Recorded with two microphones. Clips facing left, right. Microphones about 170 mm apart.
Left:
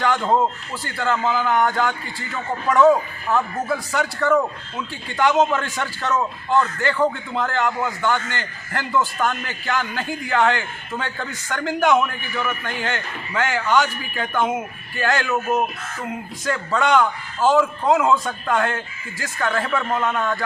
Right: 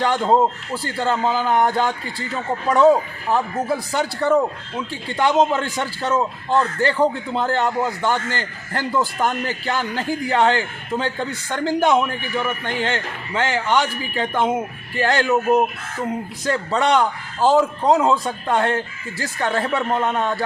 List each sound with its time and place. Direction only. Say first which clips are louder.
0.0 s a man's voice: right 2 dB; 30° right (ahead or behind)